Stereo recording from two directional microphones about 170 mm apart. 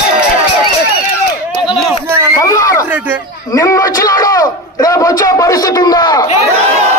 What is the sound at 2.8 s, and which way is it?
Speech, 10° right (ahead or behind).